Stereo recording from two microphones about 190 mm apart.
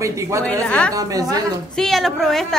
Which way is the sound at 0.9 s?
20° right (ahead or behind).